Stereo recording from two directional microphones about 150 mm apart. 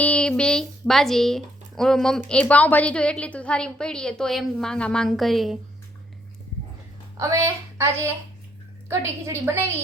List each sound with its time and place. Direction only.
0.0 s speech: 5° left (ahead or behind)
7.2 s speech: 20° right (ahead or behind)